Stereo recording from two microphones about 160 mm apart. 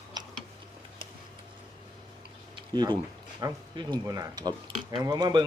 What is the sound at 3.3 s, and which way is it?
Speech, 30° right (ahead or behind).